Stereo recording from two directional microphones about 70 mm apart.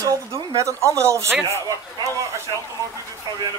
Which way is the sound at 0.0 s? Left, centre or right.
Right.